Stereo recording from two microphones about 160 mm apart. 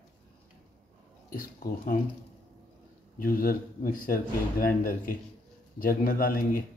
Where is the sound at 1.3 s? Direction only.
65° left (ahead or behind).